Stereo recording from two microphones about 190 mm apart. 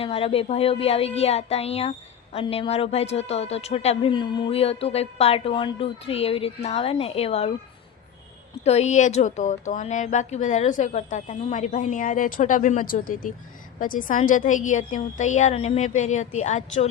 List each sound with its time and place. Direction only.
0.0 s a woman's voice: 30° left (ahead or behind)
8.6 s a woman's voice: 35° left (ahead or behind)